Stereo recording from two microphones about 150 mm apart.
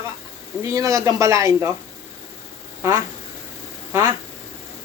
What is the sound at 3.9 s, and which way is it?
Speech, 20° right (ahead or behind).